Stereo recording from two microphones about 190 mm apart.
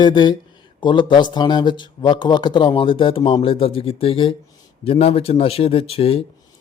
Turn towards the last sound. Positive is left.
turn(degrees=30)  # may be behind; listen again after turning